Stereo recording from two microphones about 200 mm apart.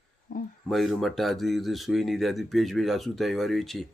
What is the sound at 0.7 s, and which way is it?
Speech, centre (ahead or behind).